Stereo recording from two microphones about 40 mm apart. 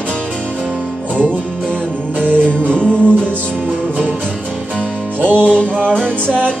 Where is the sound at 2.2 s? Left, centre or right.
Right.